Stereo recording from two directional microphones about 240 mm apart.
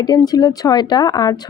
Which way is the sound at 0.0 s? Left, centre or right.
Centre.